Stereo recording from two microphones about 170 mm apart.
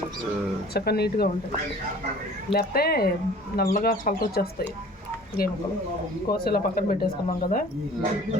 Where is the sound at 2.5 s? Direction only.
65° left (ahead or behind).